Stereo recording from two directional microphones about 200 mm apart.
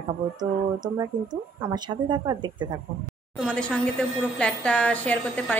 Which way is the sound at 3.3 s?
5° left (ahead or behind).